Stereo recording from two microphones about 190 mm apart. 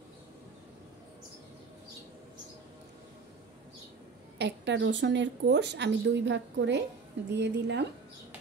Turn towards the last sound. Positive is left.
turn(degrees=-65)  # may be behind; listen again after turning